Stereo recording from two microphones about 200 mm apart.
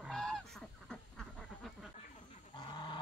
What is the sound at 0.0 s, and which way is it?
Goose, centre (ahead or behind).